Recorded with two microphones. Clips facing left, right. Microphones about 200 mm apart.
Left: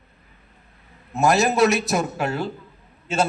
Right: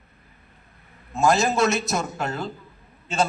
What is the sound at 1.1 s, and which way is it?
A man's voice, 20° left (ahead or behind).